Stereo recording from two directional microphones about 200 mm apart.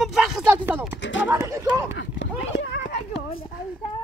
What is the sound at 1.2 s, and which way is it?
Speech, 15° right (ahead or behind).